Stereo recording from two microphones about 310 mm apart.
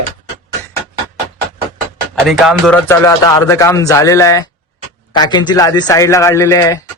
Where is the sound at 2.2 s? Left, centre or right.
Centre.